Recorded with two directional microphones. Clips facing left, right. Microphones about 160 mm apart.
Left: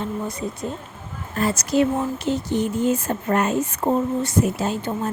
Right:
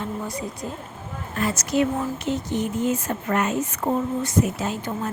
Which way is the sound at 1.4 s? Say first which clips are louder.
Left 3 dB; 35° left (ahead or behind).